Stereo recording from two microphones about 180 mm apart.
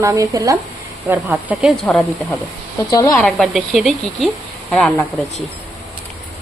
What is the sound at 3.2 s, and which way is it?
Speech, centre (ahead or behind).